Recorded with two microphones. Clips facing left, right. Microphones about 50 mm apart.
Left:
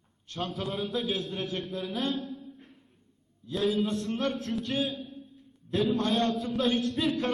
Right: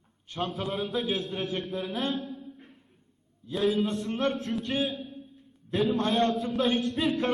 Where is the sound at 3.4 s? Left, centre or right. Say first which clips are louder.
Right 1 dB; centre.